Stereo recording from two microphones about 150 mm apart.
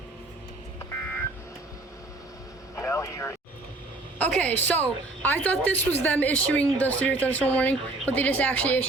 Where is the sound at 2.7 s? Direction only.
20° left (ahead or behind).